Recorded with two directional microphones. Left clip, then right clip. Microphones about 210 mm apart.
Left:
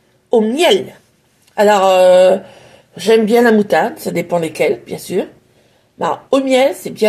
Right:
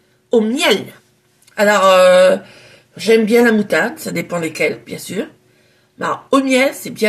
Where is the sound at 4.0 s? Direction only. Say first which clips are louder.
Left 4 dB; centre (ahead or behind).